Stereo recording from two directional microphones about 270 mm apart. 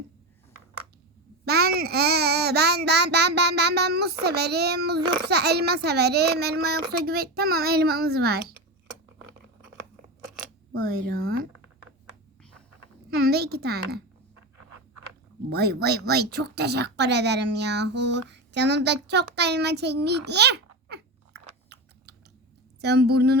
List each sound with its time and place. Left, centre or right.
1.5 s a child's voice: right
10.8 s a child's voice: right
13.1 s a woman's voice: right
15.4 s a child's voice: right
19.4 s a sound: right
22.8 s a child's voice: right